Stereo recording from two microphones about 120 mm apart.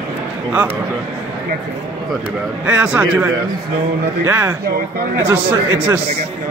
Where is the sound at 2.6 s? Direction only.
15° right (ahead or behind).